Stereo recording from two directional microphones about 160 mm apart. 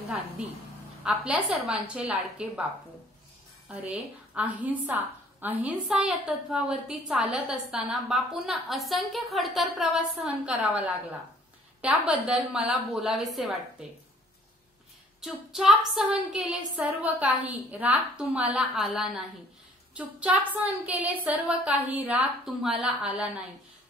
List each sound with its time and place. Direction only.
0.4 s a woman's voice: 5° right (ahead or behind)
3.9 s a woman's voice: 5° right (ahead or behind)
15.1 s a woman's voice: 5° right (ahead or behind)